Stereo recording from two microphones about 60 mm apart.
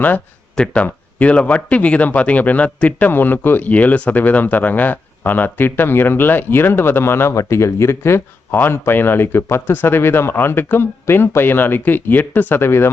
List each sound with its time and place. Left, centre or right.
0.5 s speech: centre
3.1 s speech: left